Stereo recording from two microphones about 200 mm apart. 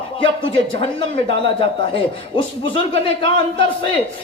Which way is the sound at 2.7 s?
25° left (ahead or behind).